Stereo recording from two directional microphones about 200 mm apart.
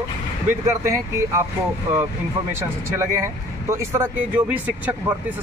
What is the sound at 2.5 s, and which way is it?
Speech, 15° right (ahead or behind).